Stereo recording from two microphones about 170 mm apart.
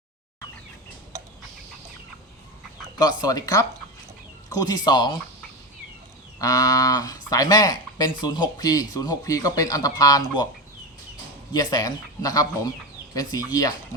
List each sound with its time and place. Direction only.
3.0 s speech: 20° left (ahead or behind)
6.4 s speech: 20° left (ahead or behind)
11.5 s speech: 20° left (ahead or behind)